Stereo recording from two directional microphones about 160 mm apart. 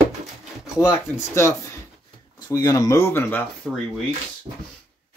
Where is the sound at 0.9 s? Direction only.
20° left (ahead or behind); by 3.8 s 5° left (ahead or behind).